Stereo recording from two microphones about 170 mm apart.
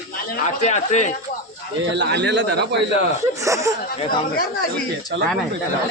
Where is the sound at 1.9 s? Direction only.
90° right.